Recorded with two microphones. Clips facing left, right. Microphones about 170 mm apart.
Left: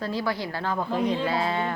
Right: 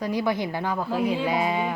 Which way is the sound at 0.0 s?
15° right (ahead or behind).